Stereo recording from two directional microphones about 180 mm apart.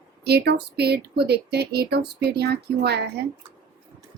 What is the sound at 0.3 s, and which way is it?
Speech, 65° right (ahead or behind).